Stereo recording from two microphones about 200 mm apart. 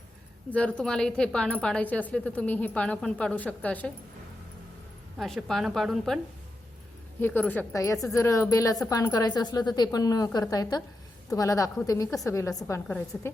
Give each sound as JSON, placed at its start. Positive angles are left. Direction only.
{"t": 0.5, "sound": "speech", "side_deg": 5}
{"t": 5.1, "sound": "a woman's voice", "side_deg": 0}
{"t": 7.2, "sound": "a woman's voice", "side_deg": 10}